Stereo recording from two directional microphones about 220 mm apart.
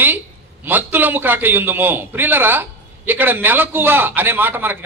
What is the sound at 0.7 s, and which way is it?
A man's voice, 10° right (ahead or behind).